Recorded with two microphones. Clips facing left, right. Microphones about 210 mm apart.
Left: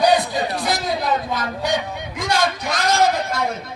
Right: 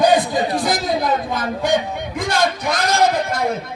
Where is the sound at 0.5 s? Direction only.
45° right (ahead or behind).